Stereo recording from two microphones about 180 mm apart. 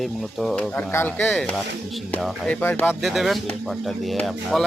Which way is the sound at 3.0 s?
Centre (ahead or behind).